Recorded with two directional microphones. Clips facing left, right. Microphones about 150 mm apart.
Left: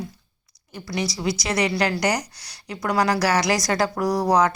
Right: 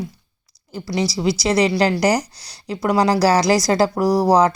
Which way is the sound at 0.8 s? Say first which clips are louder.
Right 5 dB; 30° right (ahead or behind).